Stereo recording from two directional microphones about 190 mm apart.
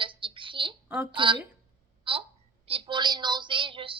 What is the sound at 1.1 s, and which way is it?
Speech, 25° right (ahead or behind).